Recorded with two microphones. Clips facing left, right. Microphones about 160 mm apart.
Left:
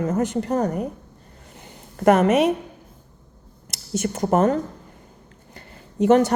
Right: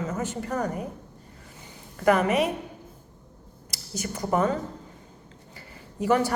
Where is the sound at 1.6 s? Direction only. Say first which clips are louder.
Left 5 dB; 50° left (ahead or behind).